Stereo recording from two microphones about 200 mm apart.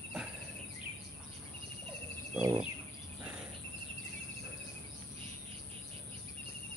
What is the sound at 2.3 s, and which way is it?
Bird, 5° right (ahead or behind).